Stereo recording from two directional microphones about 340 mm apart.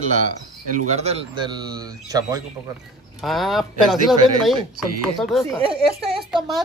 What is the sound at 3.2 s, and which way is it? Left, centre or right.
Speech, centre.